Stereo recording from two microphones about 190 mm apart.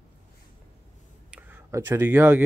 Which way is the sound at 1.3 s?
10° right (ahead or behind).